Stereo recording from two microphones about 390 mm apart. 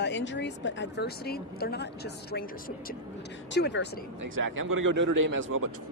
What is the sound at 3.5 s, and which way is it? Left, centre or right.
Speech, left.